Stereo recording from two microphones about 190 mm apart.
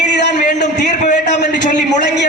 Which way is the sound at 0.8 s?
40° left (ahead or behind).